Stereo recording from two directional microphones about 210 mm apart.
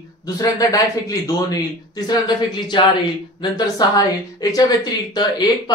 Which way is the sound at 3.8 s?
20° left (ahead or behind).